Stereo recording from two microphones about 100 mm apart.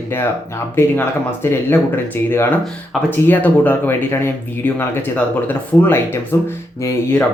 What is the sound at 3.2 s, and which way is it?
Speech, 20° left (ahead or behind).